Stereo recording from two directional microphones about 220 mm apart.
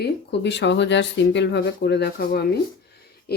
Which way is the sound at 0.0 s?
50° left (ahead or behind).